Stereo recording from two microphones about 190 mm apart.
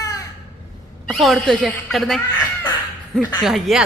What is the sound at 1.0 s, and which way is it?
A woman's voice, centre (ahead or behind).